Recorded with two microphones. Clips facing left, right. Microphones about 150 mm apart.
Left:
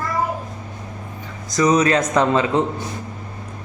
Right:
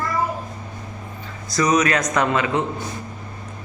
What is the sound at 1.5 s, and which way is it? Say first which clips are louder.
Speech: left 3 dB; 20° left (ahead or behind).